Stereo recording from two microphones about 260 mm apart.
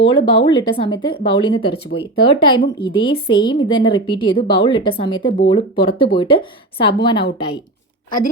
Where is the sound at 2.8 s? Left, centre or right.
Centre.